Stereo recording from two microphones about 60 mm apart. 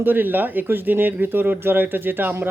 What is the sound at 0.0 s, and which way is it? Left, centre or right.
Speech, right.